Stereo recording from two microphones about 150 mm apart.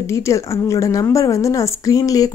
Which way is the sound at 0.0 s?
20° left (ahead or behind).